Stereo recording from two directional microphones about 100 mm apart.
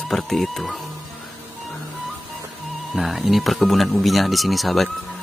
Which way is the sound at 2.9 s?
Centre (ahead or behind).